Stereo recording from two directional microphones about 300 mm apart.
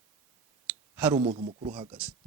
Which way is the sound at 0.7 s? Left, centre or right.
Centre.